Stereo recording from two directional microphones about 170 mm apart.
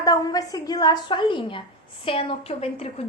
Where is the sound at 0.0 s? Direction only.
20° left (ahead or behind).